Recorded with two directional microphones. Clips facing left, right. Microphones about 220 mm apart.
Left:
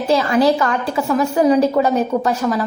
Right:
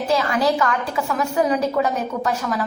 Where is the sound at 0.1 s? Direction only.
30° left (ahead or behind).